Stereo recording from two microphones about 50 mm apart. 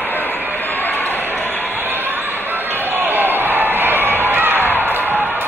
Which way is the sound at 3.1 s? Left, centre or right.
Right.